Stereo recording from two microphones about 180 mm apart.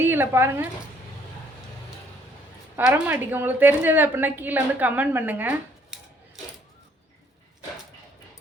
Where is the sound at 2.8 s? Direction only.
5° right (ahead or behind).